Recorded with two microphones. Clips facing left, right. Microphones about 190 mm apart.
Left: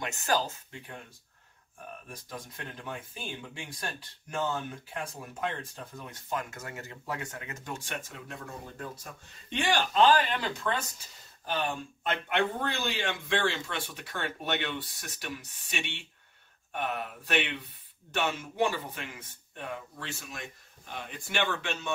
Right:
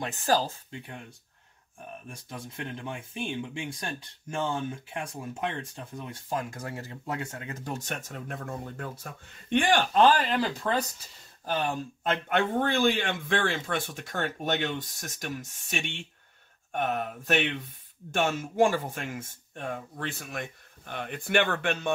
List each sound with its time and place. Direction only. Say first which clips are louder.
0.0 s speech: right 3 dB; 30° right (ahead or behind)
2.5 s speech: right 6 dB; 20° right (ahead or behind)
6.2 s speech: right 2 dB; 30° right (ahead or behind)
12.0 s a man's voice: right 2 dB; 45° right (ahead or behind)